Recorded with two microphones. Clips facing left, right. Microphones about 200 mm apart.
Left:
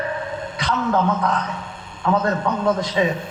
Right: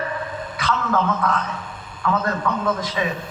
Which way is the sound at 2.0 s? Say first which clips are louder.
Left 2 dB; 25° left (ahead or behind).